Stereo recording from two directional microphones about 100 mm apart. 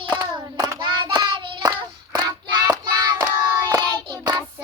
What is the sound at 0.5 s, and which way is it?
Child singing, 40° right (ahead or behind).